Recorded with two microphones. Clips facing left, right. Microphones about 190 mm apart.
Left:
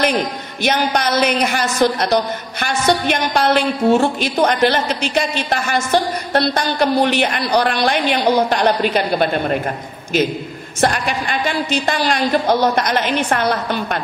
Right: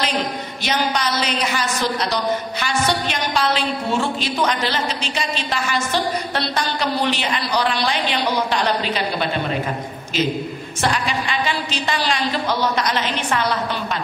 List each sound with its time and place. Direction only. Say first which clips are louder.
0.6 s a woman's voice: left 5 dB; 50° left (ahead or behind)
10.8 s a woman's voice: left 4 dB; 55° left (ahead or behind)